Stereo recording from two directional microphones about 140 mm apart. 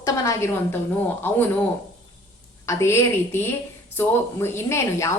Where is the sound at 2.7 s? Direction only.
20° left (ahead or behind).